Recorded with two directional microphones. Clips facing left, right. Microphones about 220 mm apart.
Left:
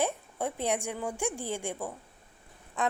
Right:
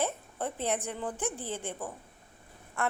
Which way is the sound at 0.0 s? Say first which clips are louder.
Left 2 dB; 15° left (ahead or behind).